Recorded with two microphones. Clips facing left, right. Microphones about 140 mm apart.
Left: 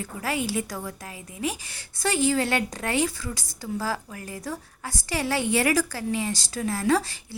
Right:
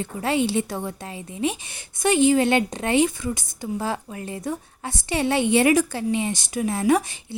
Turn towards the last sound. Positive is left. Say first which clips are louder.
# right 3 dB
turn(degrees=-20)  # may be behind; listen again after turning